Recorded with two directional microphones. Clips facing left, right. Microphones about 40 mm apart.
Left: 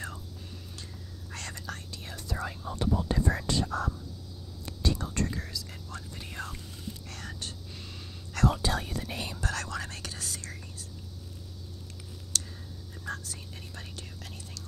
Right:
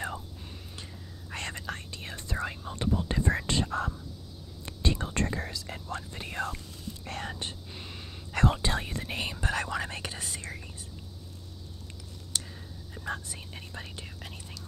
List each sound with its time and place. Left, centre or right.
1.3 s whispering: right
4.6 s whispering: right
12.3 s a sound: right
12.9 s whispering: right